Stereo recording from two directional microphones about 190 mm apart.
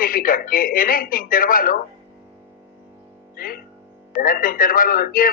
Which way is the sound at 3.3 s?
50° left (ahead or behind).